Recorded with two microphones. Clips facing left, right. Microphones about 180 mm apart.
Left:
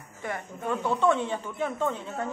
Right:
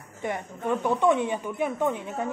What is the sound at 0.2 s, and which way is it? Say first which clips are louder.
Speech: right 3 dB; 20° right (ahead or behind).